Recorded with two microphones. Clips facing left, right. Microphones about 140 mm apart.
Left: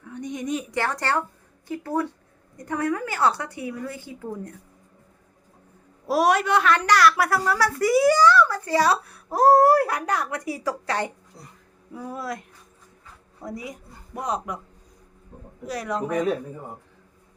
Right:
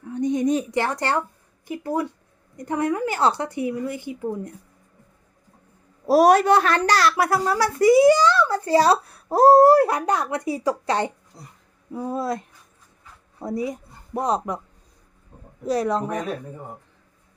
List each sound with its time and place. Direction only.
0.1 s a woman's voice: 30° right (ahead or behind)
0.7 s a woman's voice: 20° right (ahead or behind)
6.1 s a woman's voice: 40° right (ahead or behind)
15.6 s speech: 30° right (ahead or behind)